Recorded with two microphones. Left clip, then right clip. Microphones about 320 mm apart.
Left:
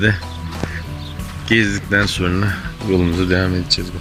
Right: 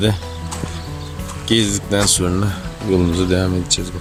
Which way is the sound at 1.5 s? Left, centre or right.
Centre.